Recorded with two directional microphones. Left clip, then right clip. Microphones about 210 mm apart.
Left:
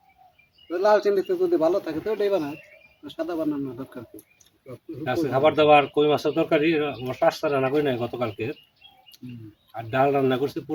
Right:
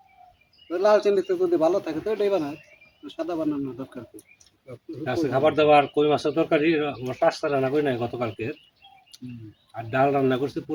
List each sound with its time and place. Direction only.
0.7 s speech: 10° right (ahead or behind)
4.6 s speech: 5° left (ahead or behind)
5.0 s speech: 20° left (ahead or behind)
9.7 s speech: 20° left (ahead or behind)